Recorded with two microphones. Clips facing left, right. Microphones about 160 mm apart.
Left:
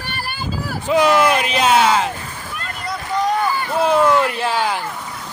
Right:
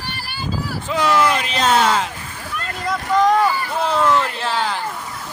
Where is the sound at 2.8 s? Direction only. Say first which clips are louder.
Right 4 dB; 90° right.